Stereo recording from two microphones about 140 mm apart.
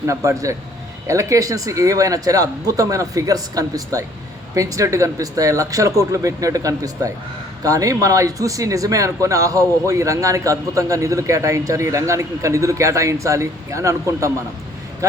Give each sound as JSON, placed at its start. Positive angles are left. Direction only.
{"t": 0.0, "sound": "speech", "side_deg": -20}